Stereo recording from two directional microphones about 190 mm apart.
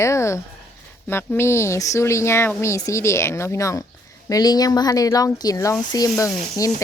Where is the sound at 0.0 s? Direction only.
15° left (ahead or behind).